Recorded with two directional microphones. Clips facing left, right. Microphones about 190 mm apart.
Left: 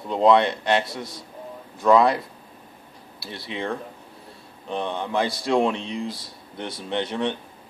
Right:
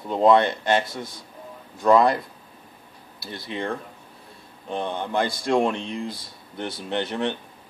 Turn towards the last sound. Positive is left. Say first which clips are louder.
# even
turn(degrees=0)  # may be behind; listen again after turning